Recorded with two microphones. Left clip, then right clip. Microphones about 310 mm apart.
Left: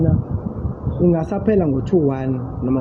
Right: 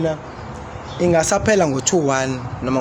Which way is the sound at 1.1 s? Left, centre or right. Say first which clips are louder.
Right 6 dB; right.